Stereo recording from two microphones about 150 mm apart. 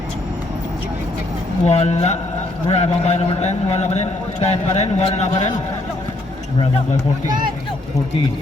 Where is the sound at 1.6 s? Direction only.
45° left (ahead or behind).